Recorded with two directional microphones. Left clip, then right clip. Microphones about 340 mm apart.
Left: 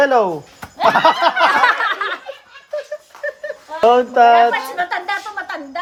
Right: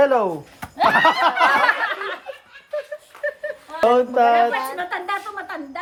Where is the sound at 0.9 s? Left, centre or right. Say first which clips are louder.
Left 4 dB; left.